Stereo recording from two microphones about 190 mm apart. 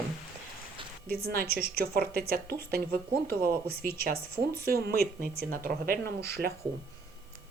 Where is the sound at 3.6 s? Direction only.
55° right (ahead or behind).